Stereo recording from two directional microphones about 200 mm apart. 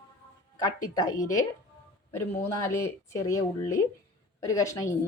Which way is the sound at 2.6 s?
15° left (ahead or behind).